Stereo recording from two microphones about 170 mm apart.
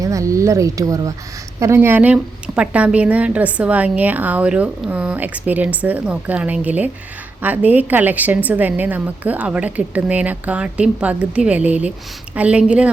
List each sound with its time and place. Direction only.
0.0 s a woman's voice: 20° right (ahead or behind)